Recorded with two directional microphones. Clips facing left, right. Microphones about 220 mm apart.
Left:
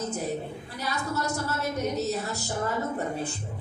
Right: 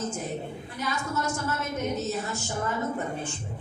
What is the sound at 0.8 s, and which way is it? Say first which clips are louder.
A woman's voice: even; 35° left (ahead or behind).